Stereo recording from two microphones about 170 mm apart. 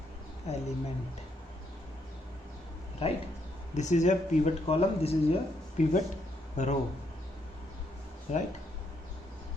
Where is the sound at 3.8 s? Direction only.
45° left (ahead or behind).